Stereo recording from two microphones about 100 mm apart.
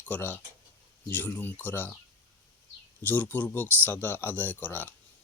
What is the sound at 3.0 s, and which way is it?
Speech, 15° left (ahead or behind).